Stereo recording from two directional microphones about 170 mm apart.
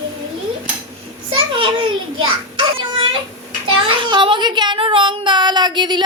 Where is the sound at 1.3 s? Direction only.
30° right (ahead or behind).